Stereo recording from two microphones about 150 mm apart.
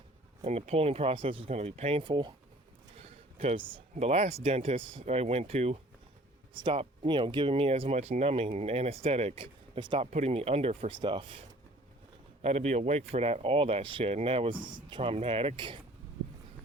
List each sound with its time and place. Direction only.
0.4 s speech: 45° right (ahead or behind)
2.9 s a sound: 40° right (ahead or behind)
3.9 s speech: 45° right (ahead or behind)
10.1 s speech: 45° right (ahead or behind)